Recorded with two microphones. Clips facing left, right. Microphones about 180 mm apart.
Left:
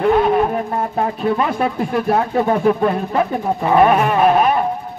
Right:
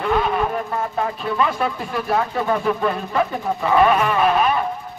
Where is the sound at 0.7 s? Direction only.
35° left (ahead or behind).